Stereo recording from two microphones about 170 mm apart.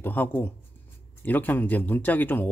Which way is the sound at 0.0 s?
10° left (ahead or behind).